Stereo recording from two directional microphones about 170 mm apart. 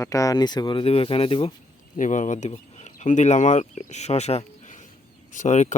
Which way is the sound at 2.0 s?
45° left (ahead or behind).